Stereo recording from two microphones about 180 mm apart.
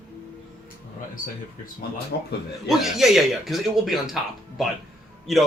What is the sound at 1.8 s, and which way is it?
Speech, 65° left (ahead or behind).